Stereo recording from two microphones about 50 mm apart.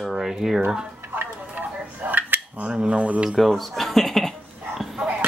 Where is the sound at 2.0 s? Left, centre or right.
Right.